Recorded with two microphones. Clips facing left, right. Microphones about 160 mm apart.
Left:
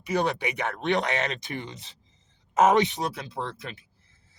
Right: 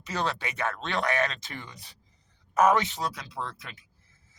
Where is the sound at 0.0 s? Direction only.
15° left (ahead or behind).